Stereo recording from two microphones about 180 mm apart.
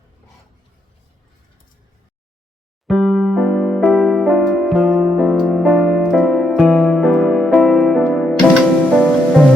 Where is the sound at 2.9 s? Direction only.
Centre (ahead or behind).